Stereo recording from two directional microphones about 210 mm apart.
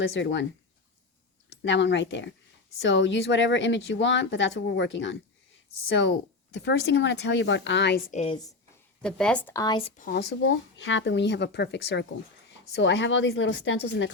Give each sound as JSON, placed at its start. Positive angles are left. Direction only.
{"t": 0.1, "sound": "speech", "side_deg": 60}
{"t": 1.6, "sound": "speech", "side_deg": 60}
{"t": 6.7, "sound": "speech", "side_deg": 60}
{"t": 8.1, "sound": "a woman's voice", "side_deg": 30}
{"t": 9.0, "sound": "speech", "side_deg": 5}
{"t": 10.0, "sound": "speech", "side_deg": 50}